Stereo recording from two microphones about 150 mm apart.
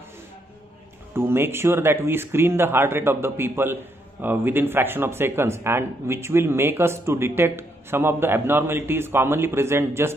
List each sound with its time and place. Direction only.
1.1 s speech: 15° right (ahead or behind)